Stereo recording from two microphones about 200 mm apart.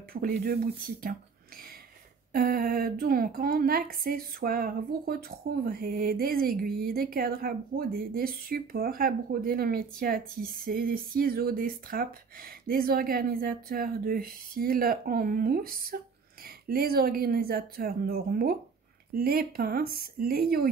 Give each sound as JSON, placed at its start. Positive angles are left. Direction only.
{"t": 0.1, "sound": "speech", "side_deg": -45}
{"t": 2.3, "sound": "speech", "side_deg": -45}